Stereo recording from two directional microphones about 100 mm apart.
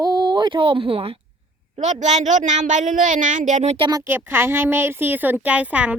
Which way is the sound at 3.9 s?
25° right (ahead or behind).